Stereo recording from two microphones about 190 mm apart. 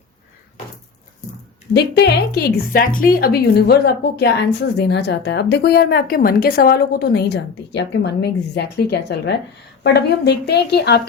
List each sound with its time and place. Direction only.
1.7 s a woman's voice: 60° left (ahead or behind)